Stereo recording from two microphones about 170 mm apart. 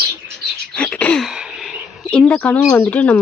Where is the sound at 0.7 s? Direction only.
5° left (ahead or behind).